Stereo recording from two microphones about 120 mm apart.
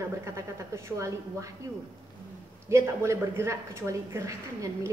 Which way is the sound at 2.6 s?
25° right (ahead or behind).